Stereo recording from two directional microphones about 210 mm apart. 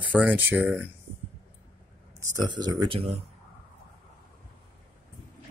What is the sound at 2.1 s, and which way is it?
Speech, 20° right (ahead or behind).